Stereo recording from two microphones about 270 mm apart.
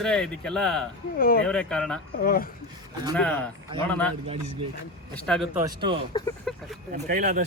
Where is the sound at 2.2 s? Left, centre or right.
Left.